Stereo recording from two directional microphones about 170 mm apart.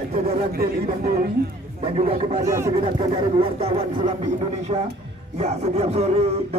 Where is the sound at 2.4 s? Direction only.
20° right (ahead or behind).